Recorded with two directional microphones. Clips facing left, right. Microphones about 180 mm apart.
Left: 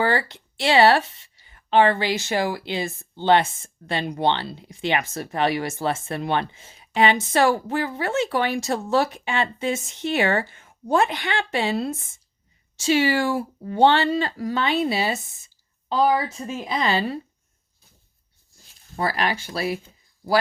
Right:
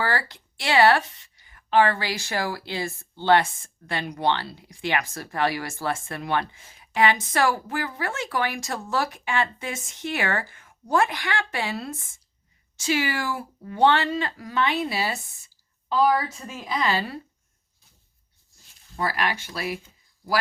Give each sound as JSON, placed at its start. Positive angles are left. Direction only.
{"t": 0.0, "sound": "speech", "side_deg": 25}
{"t": 18.9, "sound": "speech", "side_deg": 30}